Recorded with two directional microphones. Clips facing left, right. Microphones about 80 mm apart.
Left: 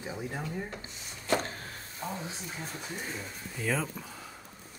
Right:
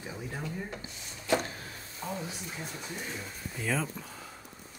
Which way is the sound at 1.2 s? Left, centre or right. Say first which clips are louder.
Right 1 dB; left.